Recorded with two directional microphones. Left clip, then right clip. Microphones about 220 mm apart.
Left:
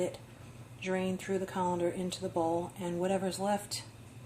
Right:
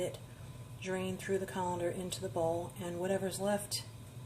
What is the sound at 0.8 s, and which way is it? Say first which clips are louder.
Speech: left 4 dB; 25° left (ahead or behind).